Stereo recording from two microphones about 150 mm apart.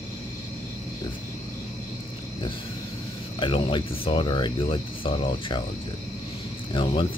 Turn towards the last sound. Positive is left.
turn(degrees=35)  # may be behind; listen again after turning